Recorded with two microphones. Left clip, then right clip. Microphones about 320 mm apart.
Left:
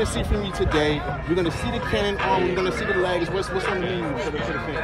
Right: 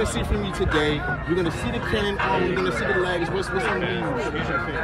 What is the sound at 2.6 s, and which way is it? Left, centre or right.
Speech, left.